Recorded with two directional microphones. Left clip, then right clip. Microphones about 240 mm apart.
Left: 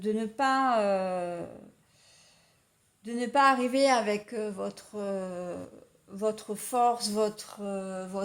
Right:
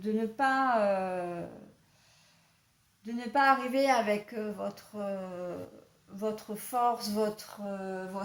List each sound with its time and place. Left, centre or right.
0.0 s speech: left
3.0 s speech: left